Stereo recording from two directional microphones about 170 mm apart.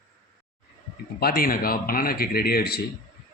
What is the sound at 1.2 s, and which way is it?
A man's voice, 60° left (ahead or behind).